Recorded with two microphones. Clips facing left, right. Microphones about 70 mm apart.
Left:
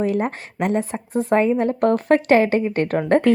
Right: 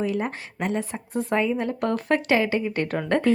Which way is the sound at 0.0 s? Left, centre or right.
Left.